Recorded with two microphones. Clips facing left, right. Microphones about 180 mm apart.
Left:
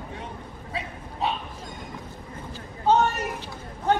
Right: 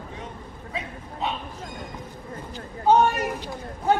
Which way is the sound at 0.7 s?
35° left (ahead or behind).